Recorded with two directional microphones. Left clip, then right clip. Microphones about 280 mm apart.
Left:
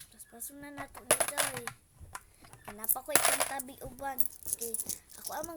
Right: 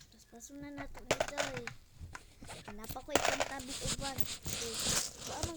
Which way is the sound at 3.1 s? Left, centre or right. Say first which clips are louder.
Left 2 dB; centre.